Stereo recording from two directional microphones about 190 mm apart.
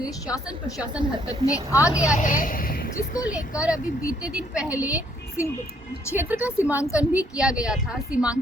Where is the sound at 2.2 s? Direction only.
45° left (ahead or behind).